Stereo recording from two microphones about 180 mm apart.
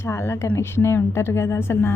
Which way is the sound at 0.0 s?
15° left (ahead or behind).